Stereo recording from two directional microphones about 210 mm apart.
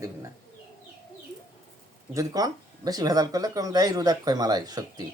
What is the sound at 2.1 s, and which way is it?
Speech, 15° right (ahead or behind).